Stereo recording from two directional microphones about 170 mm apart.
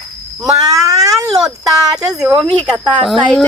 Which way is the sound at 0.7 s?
20° right (ahead or behind).